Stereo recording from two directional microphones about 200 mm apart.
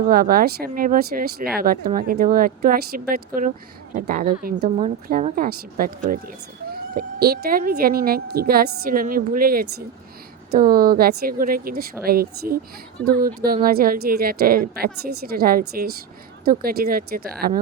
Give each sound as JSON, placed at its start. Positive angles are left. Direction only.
{"t": 0.0, "sound": "speech", "side_deg": -45}